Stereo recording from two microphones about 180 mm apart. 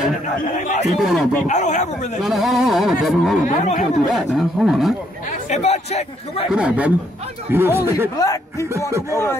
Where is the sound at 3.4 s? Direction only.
45° left (ahead or behind).